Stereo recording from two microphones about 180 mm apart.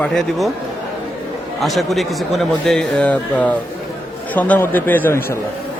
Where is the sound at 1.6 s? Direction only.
Centre (ahead or behind).